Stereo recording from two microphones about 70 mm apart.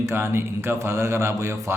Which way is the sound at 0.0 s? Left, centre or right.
Right.